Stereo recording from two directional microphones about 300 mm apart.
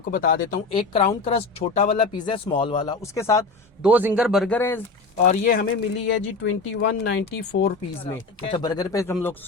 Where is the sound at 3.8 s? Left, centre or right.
Centre.